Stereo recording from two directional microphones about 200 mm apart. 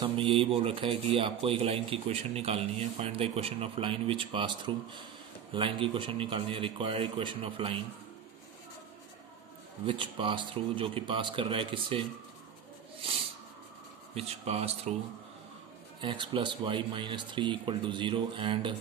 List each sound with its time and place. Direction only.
0.0 s a man's voice: 25° right (ahead or behind)
9.8 s a man's voice: 25° right (ahead or behind)
14.1 s speech: 30° right (ahead or behind)
16.0 s a man's voice: 25° right (ahead or behind)